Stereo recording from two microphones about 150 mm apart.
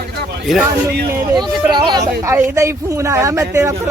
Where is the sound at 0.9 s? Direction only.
90° right.